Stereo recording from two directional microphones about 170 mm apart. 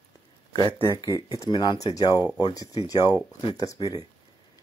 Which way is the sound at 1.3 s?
25° left (ahead or behind).